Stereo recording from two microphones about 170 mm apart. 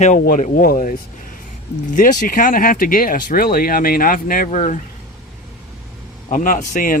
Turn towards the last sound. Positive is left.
turn(degrees=50)  # may be behind; listen again after turning